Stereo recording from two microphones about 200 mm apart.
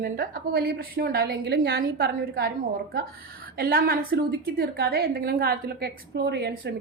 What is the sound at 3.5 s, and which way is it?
A woman's voice, 50° right (ahead or behind).